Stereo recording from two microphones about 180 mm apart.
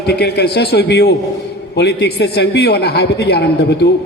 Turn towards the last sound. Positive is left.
turn(degrees=65)  # may be behind; listen again after turning